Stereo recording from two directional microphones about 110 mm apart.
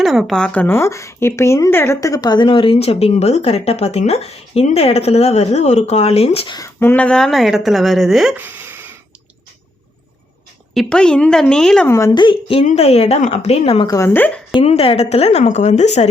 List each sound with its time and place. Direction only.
0.0 s speech: centre (ahead or behind); by 6.5 s 65° left (ahead or behind)
6.7 s speech: 15° left (ahead or behind); by 8.4 s 5° right (ahead or behind)
8.4 s a sound: 15° right (ahead or behind)
10.8 s a woman's voice: 5° left (ahead or behind)
11.9 s speech: 25° left (ahead or behind)
12.1 s speech: 45° left (ahead or behind); by 13.8 s 65° left (ahead or behind)
13.8 s a woman's voice: 30° left (ahead or behind)
14.1 s a woman's voice: 15° left (ahead or behind)
14.6 s a woman's voice: 65° left (ahead or behind); by 16.0 s 90° left